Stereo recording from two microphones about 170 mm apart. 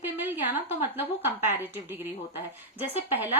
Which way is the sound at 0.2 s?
10° right (ahead or behind).